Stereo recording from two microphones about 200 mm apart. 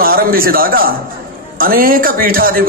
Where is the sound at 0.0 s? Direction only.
45° right (ahead or behind).